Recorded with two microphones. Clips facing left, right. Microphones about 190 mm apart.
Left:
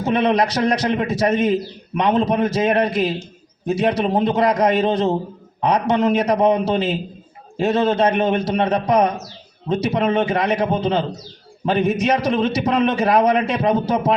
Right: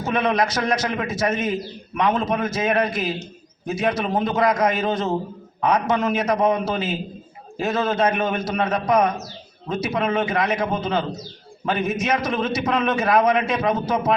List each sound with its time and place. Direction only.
0.0 s a man's voice: 30° left (ahead or behind)